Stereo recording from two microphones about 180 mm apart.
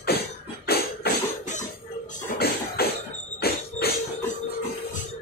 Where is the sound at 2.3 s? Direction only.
60° left (ahead or behind).